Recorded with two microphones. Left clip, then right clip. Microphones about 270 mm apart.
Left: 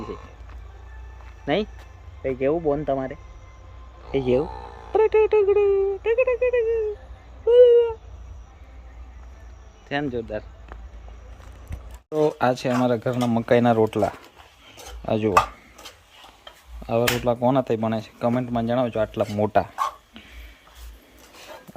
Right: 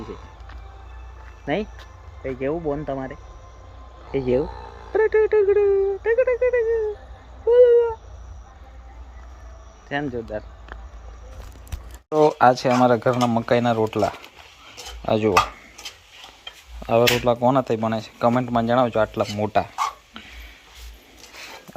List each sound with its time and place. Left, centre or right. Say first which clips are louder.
2.2 s speech: left 3 dB; centre
4.4 s speech: even; left
4.9 s a sound: even; centre
5.5 s speech: right 1 dB; centre
9.9 s speech: even; centre
12.0 s speech: right 5 dB; centre
14.7 s a sound: right 3 dB; centre
16.8 s speech: right 4 dB; centre